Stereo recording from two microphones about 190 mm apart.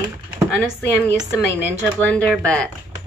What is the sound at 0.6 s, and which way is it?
Speech, 10° left (ahead or behind).